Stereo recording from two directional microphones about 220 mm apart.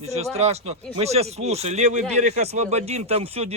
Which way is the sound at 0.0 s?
30° right (ahead or behind).